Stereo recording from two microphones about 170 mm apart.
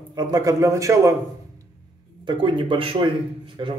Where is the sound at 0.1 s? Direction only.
20° right (ahead or behind).